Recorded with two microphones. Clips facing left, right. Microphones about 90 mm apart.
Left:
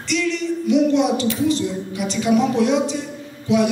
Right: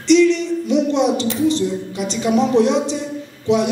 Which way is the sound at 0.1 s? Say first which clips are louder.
Right 9 dB; 25° right (ahead or behind).